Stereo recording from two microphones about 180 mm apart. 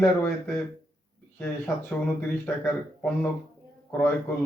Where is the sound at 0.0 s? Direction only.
10° left (ahead or behind).